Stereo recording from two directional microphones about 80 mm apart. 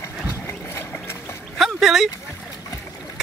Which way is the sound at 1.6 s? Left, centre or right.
Centre.